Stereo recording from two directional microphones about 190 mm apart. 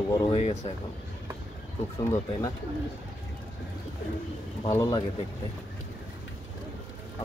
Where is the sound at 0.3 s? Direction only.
35° left (ahead or behind).